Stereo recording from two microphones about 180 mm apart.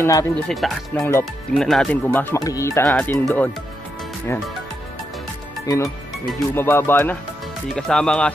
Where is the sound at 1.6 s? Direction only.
5° left (ahead or behind).